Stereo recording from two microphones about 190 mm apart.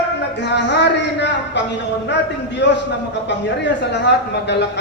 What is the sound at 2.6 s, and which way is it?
Speech, 65° left (ahead or behind).